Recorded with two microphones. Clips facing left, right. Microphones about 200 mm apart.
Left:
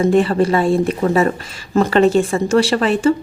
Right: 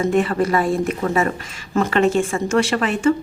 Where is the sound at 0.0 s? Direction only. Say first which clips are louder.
Left 4 dB; 30° left (ahead or behind).